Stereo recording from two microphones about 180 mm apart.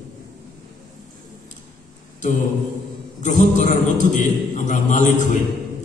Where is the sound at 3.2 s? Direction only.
45° left (ahead or behind).